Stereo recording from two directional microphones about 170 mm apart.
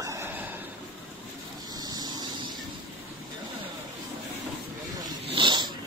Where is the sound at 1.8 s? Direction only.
25° right (ahead or behind).